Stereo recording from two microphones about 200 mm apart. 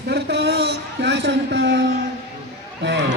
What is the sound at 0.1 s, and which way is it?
A man's voice, 60° right (ahead or behind).